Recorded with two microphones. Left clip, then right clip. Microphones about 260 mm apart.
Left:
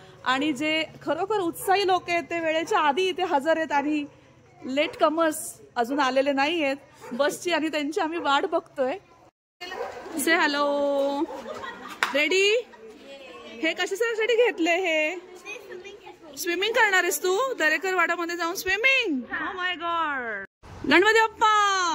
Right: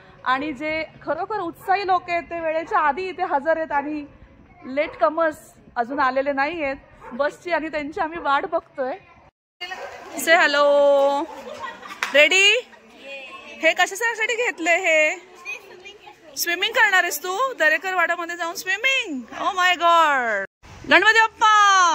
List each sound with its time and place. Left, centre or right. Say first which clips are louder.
0.2 s a woman's voice: right 2 dB; centre
10.2 s a woman's voice: right 7 dB; centre
20.2 s speech: right 9 dB; right
20.9 s a woman's voice: right 4 dB; centre